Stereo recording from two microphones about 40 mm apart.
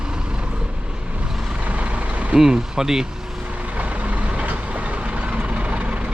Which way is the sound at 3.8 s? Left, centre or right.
Right.